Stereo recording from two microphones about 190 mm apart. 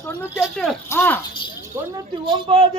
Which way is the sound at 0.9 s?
10° left (ahead or behind).